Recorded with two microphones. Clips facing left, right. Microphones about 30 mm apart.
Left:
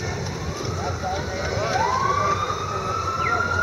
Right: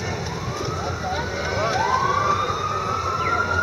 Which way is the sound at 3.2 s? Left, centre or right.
Centre.